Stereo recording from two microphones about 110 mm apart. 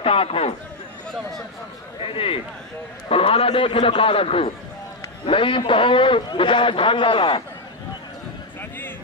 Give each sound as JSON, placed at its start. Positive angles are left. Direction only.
{"t": 0.0, "sound": "a man's voice", "side_deg": 60}
{"t": 2.0, "sound": "a man's voice", "side_deg": 55}